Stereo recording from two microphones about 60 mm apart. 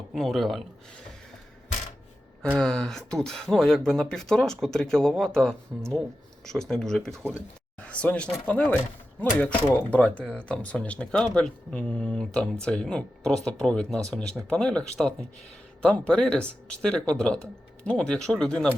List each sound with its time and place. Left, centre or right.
0.1 s speech: centre
2.4 s speech: centre
7.8 s speech: left